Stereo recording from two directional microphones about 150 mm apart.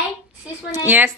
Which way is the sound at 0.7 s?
10° right (ahead or behind).